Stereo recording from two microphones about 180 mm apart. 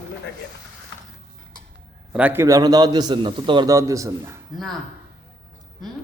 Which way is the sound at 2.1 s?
10° right (ahead or behind).